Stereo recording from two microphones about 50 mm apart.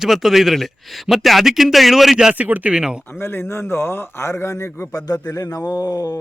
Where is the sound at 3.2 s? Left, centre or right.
Left.